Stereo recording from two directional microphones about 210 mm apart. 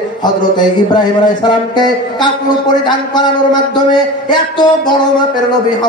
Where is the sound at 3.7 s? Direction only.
20° left (ahead or behind).